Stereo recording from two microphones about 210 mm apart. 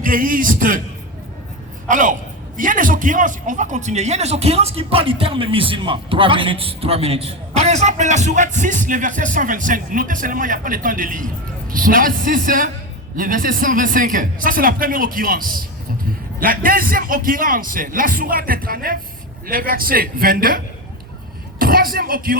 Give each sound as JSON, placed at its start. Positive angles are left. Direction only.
{"t": 0.0, "sound": "a man's voice", "side_deg": -40}
{"t": 1.9, "sound": "a man's voice", "side_deg": -40}
{"t": 21.6, "sound": "speech", "side_deg": -45}